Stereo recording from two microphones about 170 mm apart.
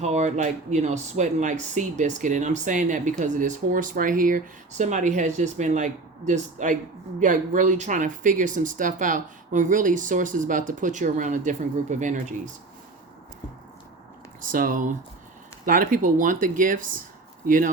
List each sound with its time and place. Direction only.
0.0 s speech: 40° right (ahead or behind)
14.4 s speech: 55° right (ahead or behind)